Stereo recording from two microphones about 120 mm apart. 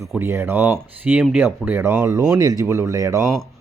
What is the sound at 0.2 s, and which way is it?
A man's voice, 20° right (ahead or behind).